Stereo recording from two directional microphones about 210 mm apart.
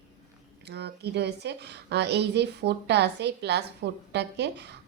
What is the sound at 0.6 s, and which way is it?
Speech, 50° right (ahead or behind).